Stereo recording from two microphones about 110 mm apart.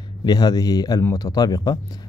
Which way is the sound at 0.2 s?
40° left (ahead or behind).